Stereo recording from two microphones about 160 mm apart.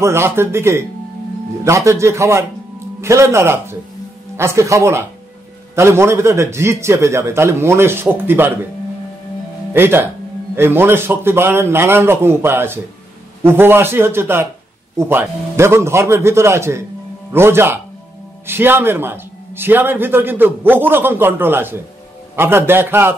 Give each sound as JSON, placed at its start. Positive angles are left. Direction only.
{"t": 0.0, "sound": "a man's voice", "side_deg": -15}
{"t": 9.8, "sound": "a man's voice", "side_deg": -15}